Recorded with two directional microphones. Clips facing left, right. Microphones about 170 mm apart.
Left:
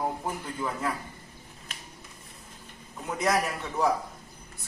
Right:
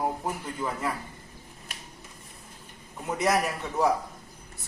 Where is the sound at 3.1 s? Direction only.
5° right (ahead or behind).